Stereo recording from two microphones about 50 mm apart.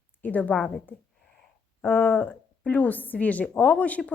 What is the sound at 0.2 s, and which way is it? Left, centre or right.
Speech, left.